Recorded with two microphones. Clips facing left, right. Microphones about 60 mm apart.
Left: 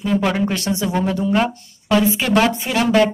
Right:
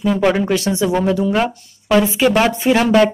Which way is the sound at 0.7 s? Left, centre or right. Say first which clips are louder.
Right 4 dB; right.